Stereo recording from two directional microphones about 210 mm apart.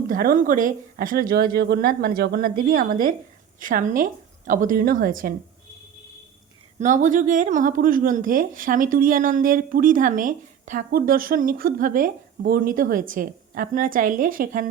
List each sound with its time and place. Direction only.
0.1 s speech: 40° right (ahead or behind)
6.7 s speech: 35° right (ahead or behind)